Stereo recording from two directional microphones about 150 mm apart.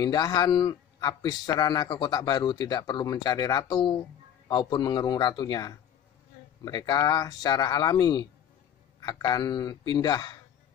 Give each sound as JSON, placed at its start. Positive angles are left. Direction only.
{"t": 0.0, "sound": "speech", "side_deg": 25}